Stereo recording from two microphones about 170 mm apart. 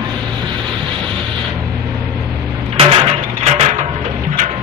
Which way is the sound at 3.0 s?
35° right (ahead or behind).